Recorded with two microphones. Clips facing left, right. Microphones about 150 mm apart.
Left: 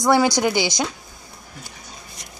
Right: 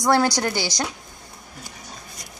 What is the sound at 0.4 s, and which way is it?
Speech, 15° left (ahead or behind).